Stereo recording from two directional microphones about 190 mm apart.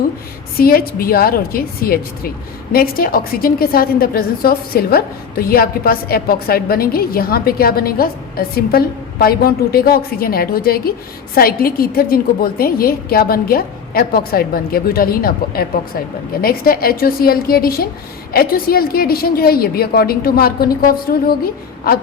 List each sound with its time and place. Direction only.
0.5 s a woman's voice: 50° left (ahead or behind)